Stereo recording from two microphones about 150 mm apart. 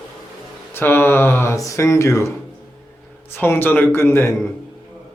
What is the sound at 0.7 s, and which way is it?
Speech, 15° left (ahead or behind).